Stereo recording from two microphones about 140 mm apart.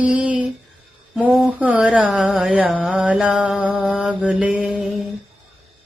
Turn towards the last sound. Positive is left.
turn(degrees=-10)  # may be behind; listen again after turning